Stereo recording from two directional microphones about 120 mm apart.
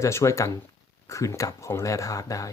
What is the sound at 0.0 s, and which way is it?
Speech, 25° left (ahead or behind).